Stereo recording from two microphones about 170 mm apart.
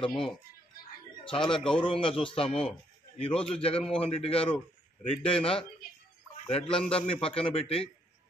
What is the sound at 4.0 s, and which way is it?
Speech, 35° left (ahead or behind).